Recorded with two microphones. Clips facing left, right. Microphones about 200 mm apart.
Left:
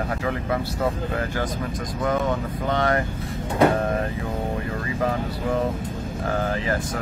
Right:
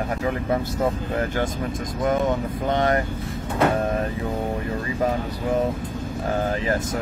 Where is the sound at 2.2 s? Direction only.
20° right (ahead or behind).